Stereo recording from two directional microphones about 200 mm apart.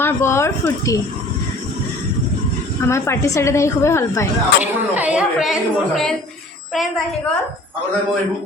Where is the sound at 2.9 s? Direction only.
15° left (ahead or behind).